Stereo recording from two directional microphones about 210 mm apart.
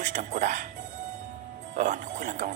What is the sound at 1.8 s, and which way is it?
Speech, 35° right (ahead or behind).